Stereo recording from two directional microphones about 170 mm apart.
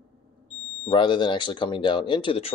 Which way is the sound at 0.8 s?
30° left (ahead or behind).